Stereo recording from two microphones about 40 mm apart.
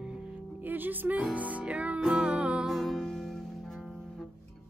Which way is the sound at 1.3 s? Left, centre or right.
Right.